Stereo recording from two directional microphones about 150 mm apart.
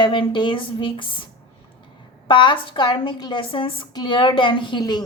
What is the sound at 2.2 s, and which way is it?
A woman's voice, 30° left (ahead or behind).